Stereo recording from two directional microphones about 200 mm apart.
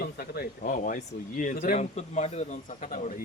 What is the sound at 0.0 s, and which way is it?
Speech, 45° left (ahead or behind).